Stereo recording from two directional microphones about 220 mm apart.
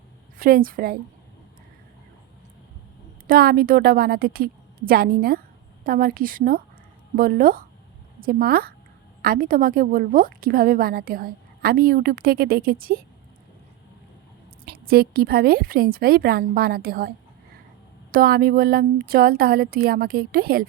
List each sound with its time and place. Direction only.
0.3 s a woman's voice: 40° right (ahead or behind)
3.2 s a woman's voice: 45° right (ahead or behind)
14.6 s a woman's voice: 45° right (ahead or behind)
18.1 s a woman's voice: 45° right (ahead or behind)